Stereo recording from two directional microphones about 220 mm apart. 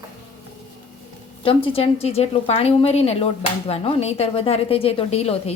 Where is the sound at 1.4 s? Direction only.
25° left (ahead or behind).